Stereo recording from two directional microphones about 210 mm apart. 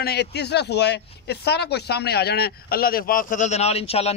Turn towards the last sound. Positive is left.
turn(degrees=30)  # may be behind; listen again after turning